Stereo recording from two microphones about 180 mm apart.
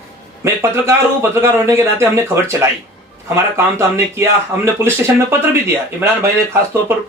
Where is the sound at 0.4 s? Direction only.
15° right (ahead or behind).